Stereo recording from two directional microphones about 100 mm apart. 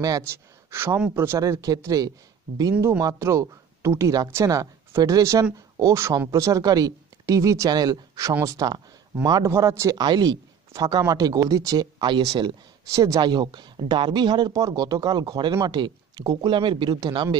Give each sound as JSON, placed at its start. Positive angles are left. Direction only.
{"t": 0.3, "sound": "speech", "side_deg": -25}
{"t": 1.4, "sound": "speech", "side_deg": -35}
{"t": 9.5, "sound": "speech", "side_deg": -30}
{"t": 9.9, "sound": "speech", "side_deg": -45}
{"t": 12.9, "sound": "speech", "side_deg": -30}
{"t": 13.2, "sound": "speech", "side_deg": -45}